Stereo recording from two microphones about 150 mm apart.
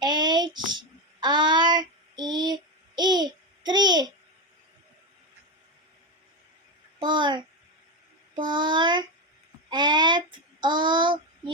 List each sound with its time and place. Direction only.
0.0 s child singing: 30° right (ahead or behind)
7.0 s a sound: 30° right (ahead or behind)
8.4 s child singing: 30° right (ahead or behind)